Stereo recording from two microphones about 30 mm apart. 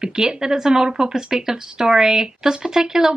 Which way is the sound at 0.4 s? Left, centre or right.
Centre.